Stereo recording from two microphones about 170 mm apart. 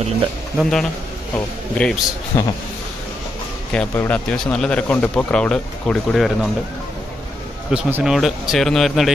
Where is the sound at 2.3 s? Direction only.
20° left (ahead or behind).